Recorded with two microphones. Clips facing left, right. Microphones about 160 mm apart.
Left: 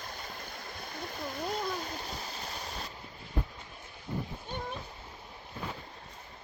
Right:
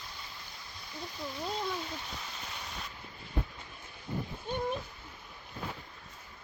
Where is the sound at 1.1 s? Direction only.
45° left (ahead or behind).